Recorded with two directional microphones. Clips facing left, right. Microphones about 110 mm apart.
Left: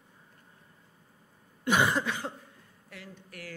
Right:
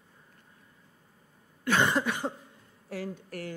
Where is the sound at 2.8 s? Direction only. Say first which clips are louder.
Right 12 dB; 35° right (ahead or behind).